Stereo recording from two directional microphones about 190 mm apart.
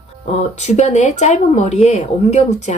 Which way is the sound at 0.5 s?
35° left (ahead or behind).